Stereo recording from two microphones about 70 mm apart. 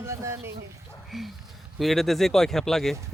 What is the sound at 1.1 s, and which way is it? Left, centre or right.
A man's voice, centre.